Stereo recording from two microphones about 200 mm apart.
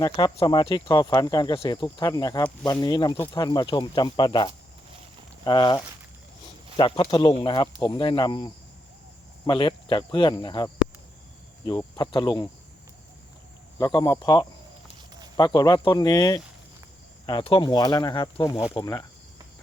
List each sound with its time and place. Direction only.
0.0 s speech: 20° left (ahead or behind)
9.5 s speech: 25° left (ahead or behind)
13.7 s speech: 20° left (ahead or behind)